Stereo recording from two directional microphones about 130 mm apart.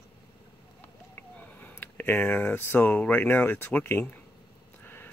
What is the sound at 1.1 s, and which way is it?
Speech, 15° left (ahead or behind).